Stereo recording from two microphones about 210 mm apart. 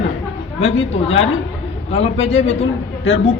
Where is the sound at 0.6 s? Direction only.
30° left (ahead or behind).